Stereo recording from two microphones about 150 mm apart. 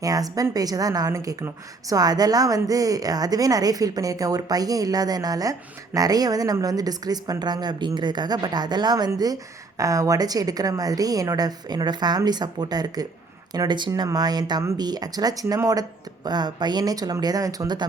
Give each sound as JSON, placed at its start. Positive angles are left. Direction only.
{"t": 0.0, "sound": "a woman's voice", "side_deg": -25}